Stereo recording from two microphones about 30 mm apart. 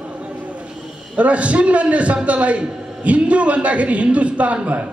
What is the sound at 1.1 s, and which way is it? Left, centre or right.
A man's voice, right.